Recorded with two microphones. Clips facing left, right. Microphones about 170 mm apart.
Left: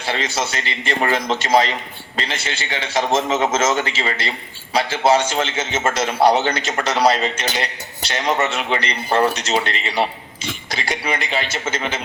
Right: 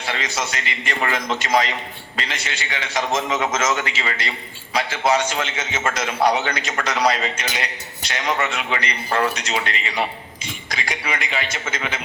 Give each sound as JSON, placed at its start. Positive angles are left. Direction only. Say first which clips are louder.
{"t": 0.0, "sound": "a man's voice", "louder": "left 3 dB", "side_deg": 30}